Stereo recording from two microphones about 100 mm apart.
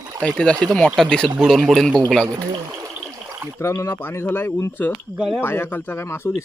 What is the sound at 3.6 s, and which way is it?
Speech, 30° left (ahead or behind).